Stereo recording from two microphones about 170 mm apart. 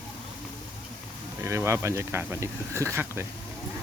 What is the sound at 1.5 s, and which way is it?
Speech, 15° right (ahead or behind).